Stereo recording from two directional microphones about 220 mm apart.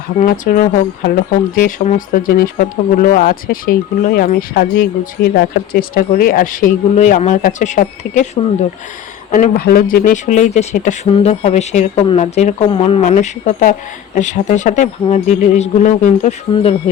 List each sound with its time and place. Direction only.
0.3 s speech: 40° left (ahead or behind)
9.3 s speech: 40° left (ahead or behind)